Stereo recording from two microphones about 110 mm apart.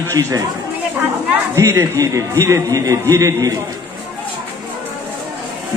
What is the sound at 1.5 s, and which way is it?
A man's voice, 30° right (ahead or behind).